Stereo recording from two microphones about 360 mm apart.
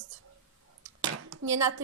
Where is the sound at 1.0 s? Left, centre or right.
Right.